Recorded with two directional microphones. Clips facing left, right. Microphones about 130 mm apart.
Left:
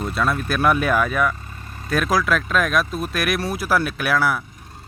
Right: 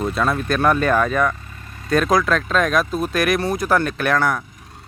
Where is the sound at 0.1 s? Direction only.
Centre (ahead or behind).